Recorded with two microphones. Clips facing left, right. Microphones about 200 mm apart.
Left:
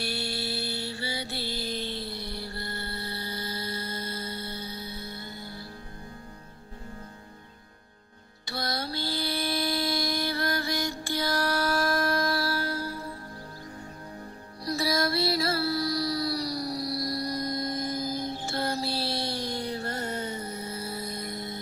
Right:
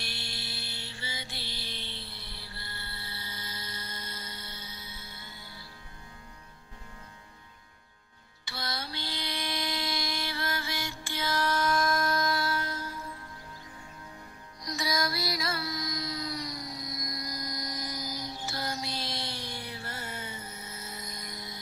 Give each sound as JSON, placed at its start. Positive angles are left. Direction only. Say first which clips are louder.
{"t": 0.0, "sound": "mantra", "louder": "left 10 dB", "side_deg": 40}
{"t": 8.5, "sound": "music", "louder": "left 6 dB", "side_deg": 40}
{"t": 9.1, "sound": "mantra", "louder": "left 6 dB", "side_deg": 35}
{"t": 14.6, "sound": "music", "louder": "left 5 dB", "side_deg": 30}
{"t": 17.6, "sound": "music", "louder": "left 8 dB", "side_deg": 55}
{"t": 18.4, "sound": "music", "louder": "left 6 dB", "side_deg": 30}
{"t": 19.1, "sound": "a sound", "louder": "left 8 dB", "side_deg": 40}